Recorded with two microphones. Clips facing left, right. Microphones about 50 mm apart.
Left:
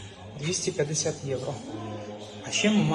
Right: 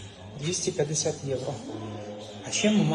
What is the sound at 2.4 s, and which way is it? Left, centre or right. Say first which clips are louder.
Speech: even; left.